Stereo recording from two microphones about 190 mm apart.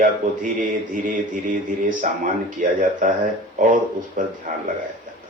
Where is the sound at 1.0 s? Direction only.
45° right (ahead or behind).